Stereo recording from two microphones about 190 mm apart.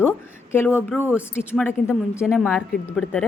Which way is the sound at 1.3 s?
10° left (ahead or behind).